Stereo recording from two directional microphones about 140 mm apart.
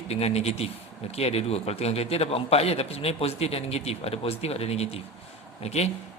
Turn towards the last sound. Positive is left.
turn(degrees=50)  # may be behind; listen again after turning